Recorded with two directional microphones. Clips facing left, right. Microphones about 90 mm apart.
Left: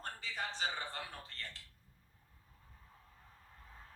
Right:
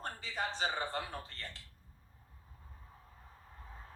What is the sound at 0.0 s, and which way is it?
A man's voice, 20° right (ahead or behind).